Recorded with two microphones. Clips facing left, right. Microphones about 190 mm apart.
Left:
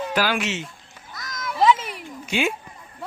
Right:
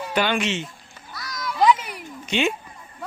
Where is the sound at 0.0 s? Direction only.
Centre (ahead or behind).